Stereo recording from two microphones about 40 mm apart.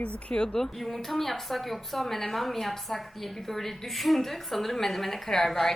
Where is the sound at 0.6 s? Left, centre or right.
Centre.